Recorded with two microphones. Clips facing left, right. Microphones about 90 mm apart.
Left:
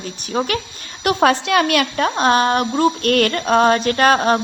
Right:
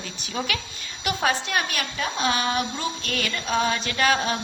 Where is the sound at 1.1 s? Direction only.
75° left (ahead or behind).